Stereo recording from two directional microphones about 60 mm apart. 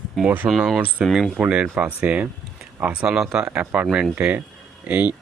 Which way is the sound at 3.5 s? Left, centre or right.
Right.